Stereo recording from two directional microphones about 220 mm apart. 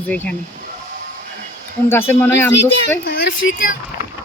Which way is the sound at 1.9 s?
10° left (ahead or behind).